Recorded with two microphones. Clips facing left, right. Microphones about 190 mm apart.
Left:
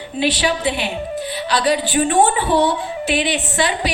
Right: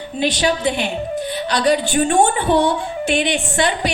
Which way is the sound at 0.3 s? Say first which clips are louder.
Right 1 dB; 45° right (ahead or behind).